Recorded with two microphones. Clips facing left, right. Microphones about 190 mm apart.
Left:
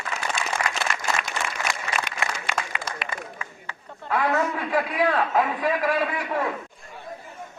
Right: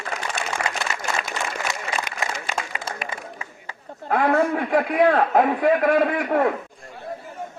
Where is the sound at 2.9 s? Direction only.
30° right (ahead or behind).